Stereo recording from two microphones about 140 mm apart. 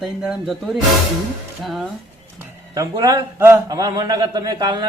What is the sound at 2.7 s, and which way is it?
A man's voice, 25° right (ahead or behind).